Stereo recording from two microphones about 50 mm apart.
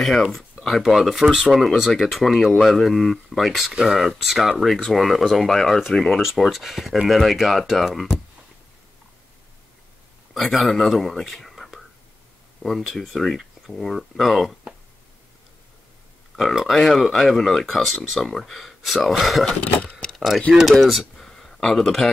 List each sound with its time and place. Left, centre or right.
0.0 s speech: centre
1.6 s speech: centre
6.2 s speech: centre
10.3 s speech: centre
11.2 s whispering: centre
12.6 s speech: centre
16.3 s speech: centre
19.6 s speech: left
20.2 s speech: centre
21.2 s a sound: centre